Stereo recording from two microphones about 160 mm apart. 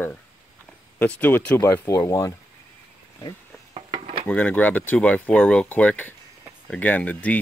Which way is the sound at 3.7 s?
30° right (ahead or behind).